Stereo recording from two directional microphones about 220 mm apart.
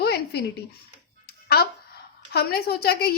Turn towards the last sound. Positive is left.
turn(degrees=45)  # may be behind; listen again after turning